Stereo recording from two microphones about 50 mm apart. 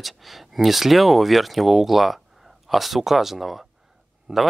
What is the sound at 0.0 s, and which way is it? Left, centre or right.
Speech, centre.